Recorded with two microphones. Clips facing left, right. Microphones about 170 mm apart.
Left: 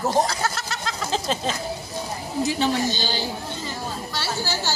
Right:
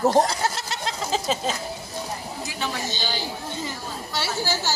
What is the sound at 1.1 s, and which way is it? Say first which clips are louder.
Speech: even; 5° right (ahead or behind).